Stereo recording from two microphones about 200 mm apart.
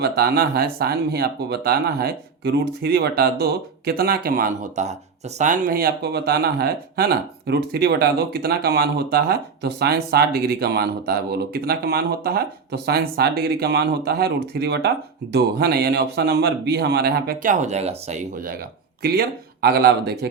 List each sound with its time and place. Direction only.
0.0 s a man's voice: 50° right (ahead or behind)
19.6 s a man's voice: 50° right (ahead or behind)